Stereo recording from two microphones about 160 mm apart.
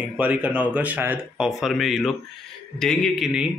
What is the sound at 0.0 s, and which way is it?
A man's voice, 10° right (ahead or behind).